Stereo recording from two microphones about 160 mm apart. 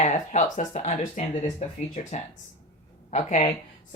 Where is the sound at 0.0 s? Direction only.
45° left (ahead or behind).